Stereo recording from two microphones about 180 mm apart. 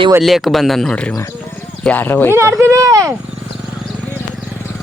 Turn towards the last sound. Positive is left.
turn(degrees=0)  # may be behind; listen again after turning